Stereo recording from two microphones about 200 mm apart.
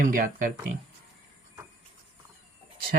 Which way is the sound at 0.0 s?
45° right (ahead or behind).